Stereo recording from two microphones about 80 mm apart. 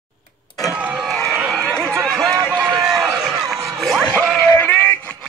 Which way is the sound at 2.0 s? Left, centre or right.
Centre.